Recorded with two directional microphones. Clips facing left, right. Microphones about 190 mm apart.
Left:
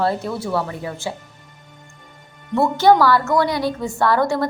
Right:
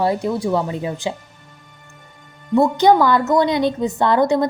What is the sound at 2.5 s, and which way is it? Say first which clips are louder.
A woman's voice: right 1 dB; 15° right (ahead or behind).